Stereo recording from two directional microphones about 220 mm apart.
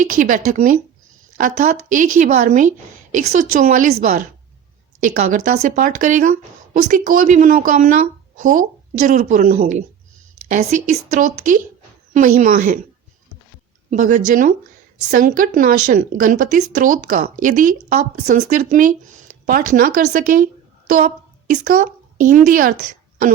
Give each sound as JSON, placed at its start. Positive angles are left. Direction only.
{"t": 0.0, "sound": "a woman's voice", "side_deg": -35}
{"t": 13.9, "sound": "a woman's voice", "side_deg": -35}